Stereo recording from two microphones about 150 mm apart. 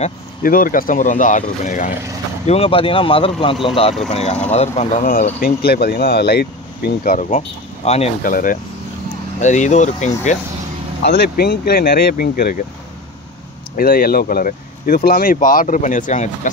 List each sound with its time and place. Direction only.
0.4 s speech: 70° left (ahead or behind)
2.4 s speech: 40° left (ahead or behind)
5.4 s speech: 90° left; by 8.1 s 45° left (ahead or behind)
8.2 s speech: 65° left (ahead or behind)
9.4 s speech: 55° left (ahead or behind)
11.1 s speech: 90° left
13.7 s speech: 75° left (ahead or behind)
15.3 s speech: 60° left (ahead or behind)